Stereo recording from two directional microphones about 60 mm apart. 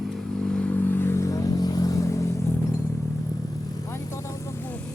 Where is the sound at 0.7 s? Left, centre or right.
Left.